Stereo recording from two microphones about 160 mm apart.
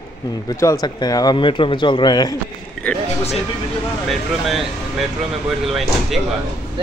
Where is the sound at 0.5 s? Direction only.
20° left (ahead or behind).